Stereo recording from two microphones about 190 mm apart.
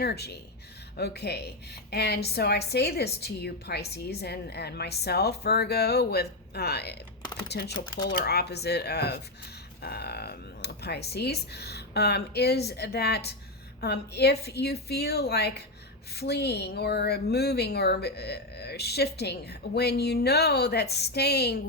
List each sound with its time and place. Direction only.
0.0 s a woman's voice: 60° left (ahead or behind)